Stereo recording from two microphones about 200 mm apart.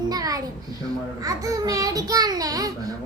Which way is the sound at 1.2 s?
15° right (ahead or behind).